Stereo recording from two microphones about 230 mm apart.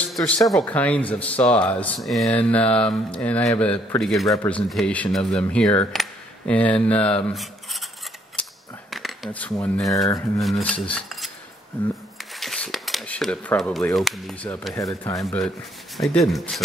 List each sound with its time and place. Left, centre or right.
0.0 s speech: centre
7.2 s a sound: centre
8.9 s speech: centre
10.4 s cutlery: centre
12.4 s speech: centre
16.0 s speech: centre